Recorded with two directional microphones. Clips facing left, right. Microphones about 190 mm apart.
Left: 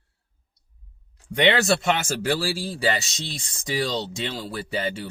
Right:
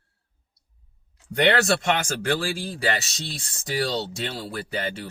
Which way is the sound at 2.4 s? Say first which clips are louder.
Left 1 dB; 50° right (ahead or behind).